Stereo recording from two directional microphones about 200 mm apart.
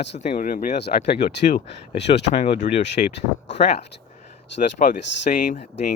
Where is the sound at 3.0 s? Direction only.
45° left (ahead or behind).